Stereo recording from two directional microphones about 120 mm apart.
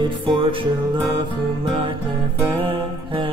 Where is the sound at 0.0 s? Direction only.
50° right (ahead or behind).